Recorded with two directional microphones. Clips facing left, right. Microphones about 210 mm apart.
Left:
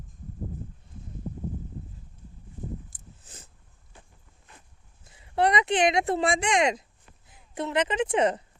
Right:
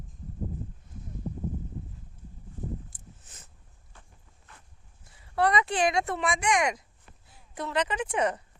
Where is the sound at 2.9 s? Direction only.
30° left (ahead or behind).